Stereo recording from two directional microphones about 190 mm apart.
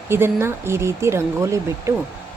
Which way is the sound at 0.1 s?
15° right (ahead or behind).